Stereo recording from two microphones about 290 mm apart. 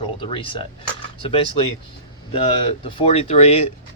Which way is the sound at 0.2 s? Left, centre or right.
Centre.